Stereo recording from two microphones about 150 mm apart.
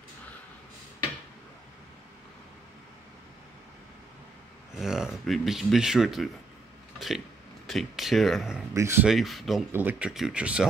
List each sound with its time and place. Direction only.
4.7 s speech: 5° right (ahead or behind)
7.6 s speech: centre (ahead or behind)
8.7 s speech: 20° right (ahead or behind)
9.0 s speech: centre (ahead or behind)
9.7 s speech: 15° right (ahead or behind)